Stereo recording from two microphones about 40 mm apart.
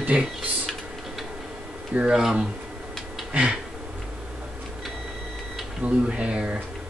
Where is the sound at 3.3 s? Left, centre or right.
Right.